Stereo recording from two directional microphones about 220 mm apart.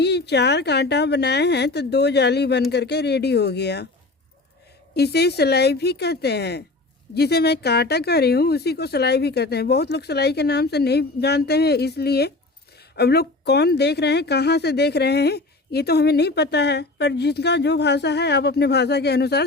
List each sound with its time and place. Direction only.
0.0 s a woman's voice: 50° left (ahead or behind)
4.9 s a woman's voice: 45° left (ahead or behind)